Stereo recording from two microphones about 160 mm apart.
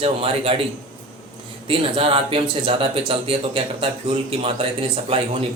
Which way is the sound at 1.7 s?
35° right (ahead or behind).